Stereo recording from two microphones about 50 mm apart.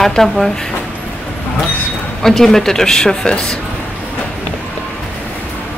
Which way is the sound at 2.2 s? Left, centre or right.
Centre.